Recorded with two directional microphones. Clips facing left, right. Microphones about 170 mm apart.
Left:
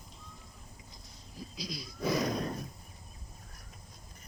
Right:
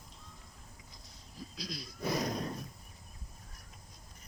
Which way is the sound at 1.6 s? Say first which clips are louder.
Left 2 dB; centre (ahead or behind).